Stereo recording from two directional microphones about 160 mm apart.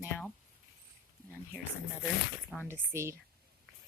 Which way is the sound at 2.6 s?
15° right (ahead or behind).